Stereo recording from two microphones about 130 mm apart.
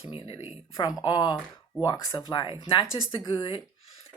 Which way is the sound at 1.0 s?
30° left (ahead or behind).